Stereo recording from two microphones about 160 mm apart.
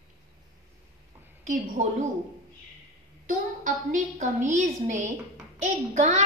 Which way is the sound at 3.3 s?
55° right (ahead or behind).